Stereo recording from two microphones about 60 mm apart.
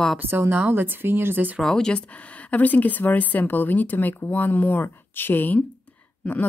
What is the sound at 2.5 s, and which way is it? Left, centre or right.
A woman's voice, left.